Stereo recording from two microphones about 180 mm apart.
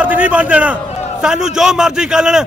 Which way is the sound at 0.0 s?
10° right (ahead or behind).